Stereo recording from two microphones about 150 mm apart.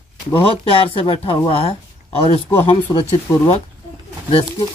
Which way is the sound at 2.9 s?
25° left (ahead or behind).